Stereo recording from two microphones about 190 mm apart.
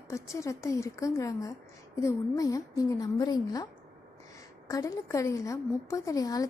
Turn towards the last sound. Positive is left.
turn(degrees=20)  # may be behind; listen again after turning